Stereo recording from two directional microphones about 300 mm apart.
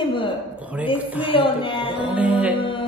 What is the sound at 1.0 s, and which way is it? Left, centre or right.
Music, centre.